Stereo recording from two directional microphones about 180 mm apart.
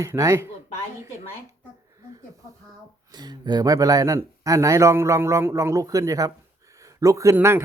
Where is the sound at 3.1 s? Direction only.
25° right (ahead or behind).